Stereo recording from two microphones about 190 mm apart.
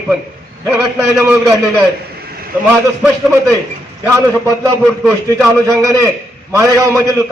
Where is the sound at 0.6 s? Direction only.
15° right (ahead or behind).